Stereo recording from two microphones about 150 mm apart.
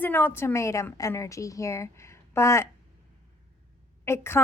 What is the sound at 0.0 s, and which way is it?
A woman's voice, 15° left (ahead or behind).